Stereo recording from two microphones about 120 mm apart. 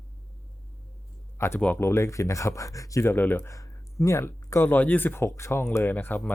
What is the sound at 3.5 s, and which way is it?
Speech, 25° left (ahead or behind).